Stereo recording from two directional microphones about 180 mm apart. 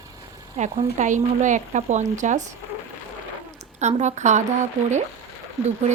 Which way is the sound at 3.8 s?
40° right (ahead or behind).